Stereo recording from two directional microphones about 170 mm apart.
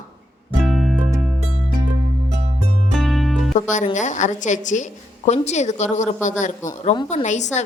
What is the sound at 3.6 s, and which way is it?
Speech, 45° left (ahead or behind).